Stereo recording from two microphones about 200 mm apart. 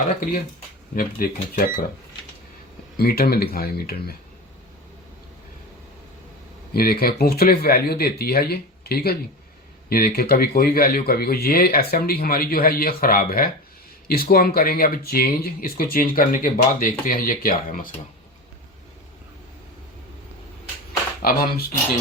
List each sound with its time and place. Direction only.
0.9 s speech: 45° left (ahead or behind)
3.0 s speech: 50° left (ahead or behind)
6.7 s speech: 50° left (ahead or behind)
21.2 s speech: 50° left (ahead or behind)